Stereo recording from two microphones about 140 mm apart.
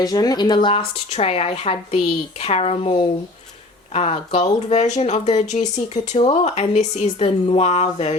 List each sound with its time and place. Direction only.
0.0 s speech: 25° left (ahead or behind); by 8.1 s 50° left (ahead or behind)